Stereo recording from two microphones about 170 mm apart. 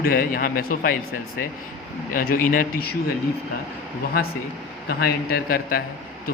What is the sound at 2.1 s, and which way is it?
Speech, 55° left (ahead or behind).